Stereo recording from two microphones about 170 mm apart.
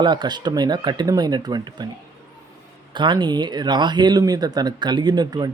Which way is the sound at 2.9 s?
25° right (ahead or behind).